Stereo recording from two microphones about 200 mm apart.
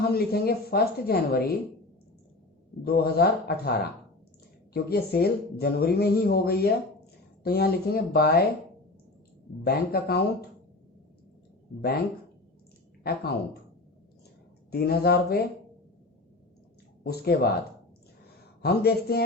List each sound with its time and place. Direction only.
0.0 s speech: 50° left (ahead or behind)
2.8 s speech: 50° left (ahead or behind)
9.6 s speech: 50° left (ahead or behind)
11.8 s speech: 50° left (ahead or behind)
14.7 s speech: 50° left (ahead or behind)
17.0 s speech: 50° left (ahead or behind)
18.6 s speech: 50° left (ahead or behind)